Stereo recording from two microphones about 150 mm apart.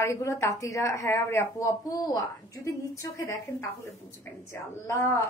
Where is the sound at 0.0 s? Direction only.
20° left (ahead or behind).